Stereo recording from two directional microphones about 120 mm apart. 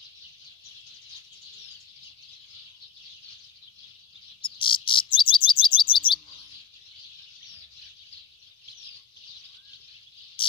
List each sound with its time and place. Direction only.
4.6 s chirp: 45° left (ahead or behind)